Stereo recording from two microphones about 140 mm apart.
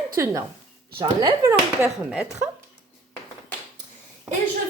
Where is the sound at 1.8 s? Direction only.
10° right (ahead or behind).